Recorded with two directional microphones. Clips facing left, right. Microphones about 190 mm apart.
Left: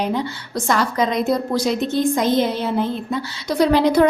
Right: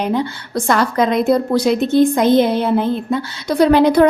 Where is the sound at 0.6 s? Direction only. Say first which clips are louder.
Right 4 dB; 60° right (ahead or behind).